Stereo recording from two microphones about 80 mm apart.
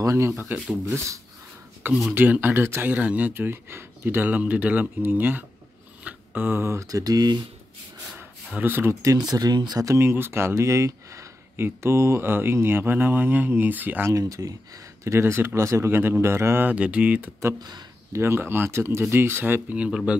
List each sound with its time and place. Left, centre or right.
0.0 s speech: right
1.8 s speech: right
8.5 s speech: right
9.3 s speech: right
9.8 s speech: right
14.1 s speech: right
15.0 s speech: right
16.7 s speech: centre
17.6 s speech: right
18.1 s speech: right; by 20.0 s centre